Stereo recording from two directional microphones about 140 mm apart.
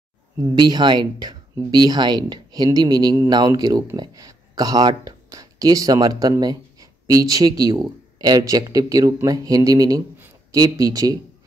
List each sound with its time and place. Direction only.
0.4 s speech: 30° right (ahead or behind)